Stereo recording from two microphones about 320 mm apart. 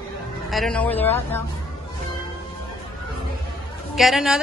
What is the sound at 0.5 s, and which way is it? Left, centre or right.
Speech, centre.